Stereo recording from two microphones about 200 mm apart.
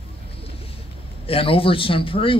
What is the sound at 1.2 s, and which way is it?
A man's voice, 25° left (ahead or behind).